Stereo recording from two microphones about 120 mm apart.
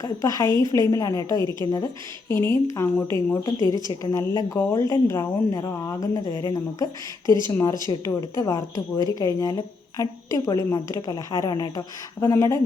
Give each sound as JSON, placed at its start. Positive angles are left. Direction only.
{"t": 0.0, "sound": "a woman's voice", "side_deg": 30}
{"t": 2.3, "sound": "a woman's voice", "side_deg": 20}